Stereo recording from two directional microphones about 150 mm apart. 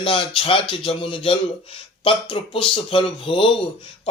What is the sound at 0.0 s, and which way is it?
Speech, 35° left (ahead or behind).